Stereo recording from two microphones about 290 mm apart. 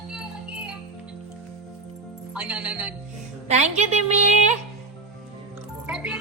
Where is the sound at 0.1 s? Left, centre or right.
Centre.